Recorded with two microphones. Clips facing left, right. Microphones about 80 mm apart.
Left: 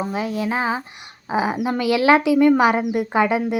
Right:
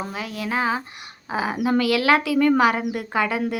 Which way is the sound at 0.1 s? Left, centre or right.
Left.